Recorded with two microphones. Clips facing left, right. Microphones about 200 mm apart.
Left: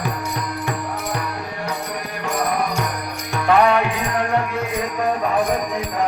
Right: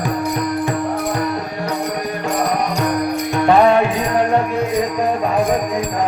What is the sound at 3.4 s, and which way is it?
Music, 30° right (ahead or behind).